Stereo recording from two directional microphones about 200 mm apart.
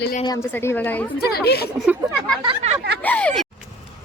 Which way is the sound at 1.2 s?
50° left (ahead or behind).